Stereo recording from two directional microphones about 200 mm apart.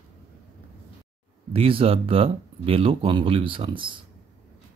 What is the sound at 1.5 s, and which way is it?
Speech, 30° right (ahead or behind).